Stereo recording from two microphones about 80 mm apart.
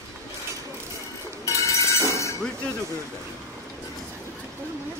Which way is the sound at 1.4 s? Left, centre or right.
Left.